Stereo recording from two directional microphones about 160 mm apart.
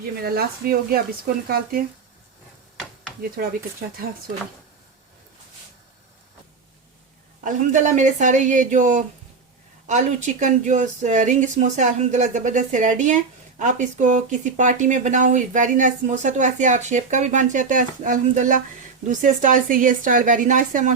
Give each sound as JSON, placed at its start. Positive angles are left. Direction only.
{"t": 0.2, "sound": "speech", "side_deg": -70}
{"t": 3.4, "sound": "a woman's voice", "side_deg": -65}
{"t": 7.4, "sound": "a woman's voice", "side_deg": -50}